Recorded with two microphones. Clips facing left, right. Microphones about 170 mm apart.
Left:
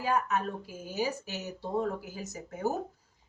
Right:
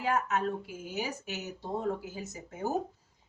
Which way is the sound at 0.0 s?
20° right (ahead or behind).